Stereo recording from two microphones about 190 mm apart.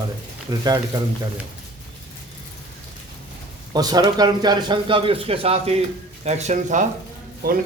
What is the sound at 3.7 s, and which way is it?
Speech, 20° right (ahead or behind).